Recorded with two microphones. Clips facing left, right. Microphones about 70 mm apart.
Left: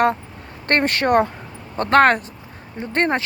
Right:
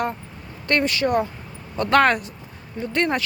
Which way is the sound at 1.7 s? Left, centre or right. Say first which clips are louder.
Left 3 dB; left.